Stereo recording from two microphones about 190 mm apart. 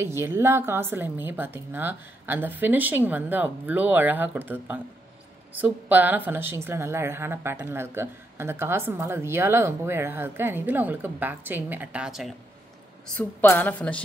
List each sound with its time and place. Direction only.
0.0 s speech: 15° right (ahead or behind)
13.2 s speech: 10° left (ahead or behind)